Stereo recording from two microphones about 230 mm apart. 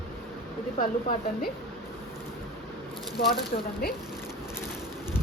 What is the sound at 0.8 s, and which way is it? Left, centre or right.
Speech, left.